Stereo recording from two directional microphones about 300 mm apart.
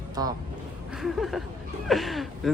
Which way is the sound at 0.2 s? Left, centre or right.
Centre.